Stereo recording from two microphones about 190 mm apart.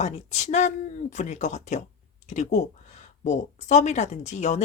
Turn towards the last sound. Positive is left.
turn(degrees=35)  # may be behind; listen again after turning